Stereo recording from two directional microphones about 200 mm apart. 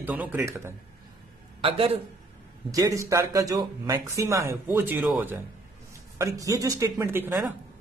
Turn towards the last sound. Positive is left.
turn(degrees=-10)  # may be behind; listen again after turning